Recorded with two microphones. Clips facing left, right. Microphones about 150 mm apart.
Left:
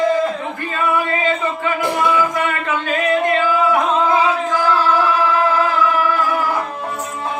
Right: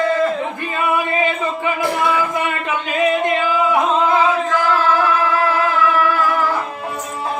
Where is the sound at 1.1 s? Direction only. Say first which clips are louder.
Even; 15° right (ahead or behind).